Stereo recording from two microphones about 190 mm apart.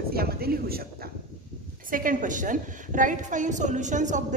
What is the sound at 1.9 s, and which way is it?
A woman's voice, 45° right (ahead or behind).